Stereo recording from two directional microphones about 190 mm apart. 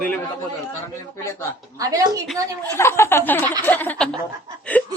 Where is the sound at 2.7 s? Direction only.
15° left (ahead or behind).